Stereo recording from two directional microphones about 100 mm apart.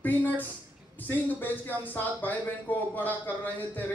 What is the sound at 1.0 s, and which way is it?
Speech, 20° left (ahead or behind).